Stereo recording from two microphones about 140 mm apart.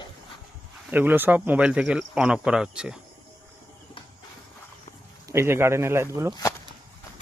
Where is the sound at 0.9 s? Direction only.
15° right (ahead or behind).